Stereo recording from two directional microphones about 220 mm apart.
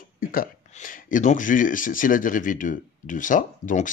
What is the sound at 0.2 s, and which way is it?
Speech, 40° left (ahead or behind).